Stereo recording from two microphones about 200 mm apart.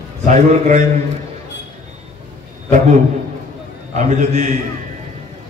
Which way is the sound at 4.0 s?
35° right (ahead or behind).